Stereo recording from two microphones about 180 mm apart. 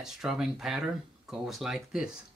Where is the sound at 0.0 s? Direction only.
Centre (ahead or behind).